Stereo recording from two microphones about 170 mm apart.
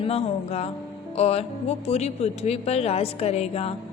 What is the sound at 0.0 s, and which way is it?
A woman's voice, 35° left (ahead or behind).